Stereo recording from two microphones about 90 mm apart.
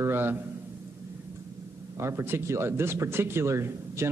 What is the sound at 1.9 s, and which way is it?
Speech, 30° right (ahead or behind).